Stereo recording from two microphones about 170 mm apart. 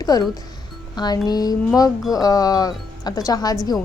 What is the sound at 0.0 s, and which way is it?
Speech, 20° left (ahead or behind).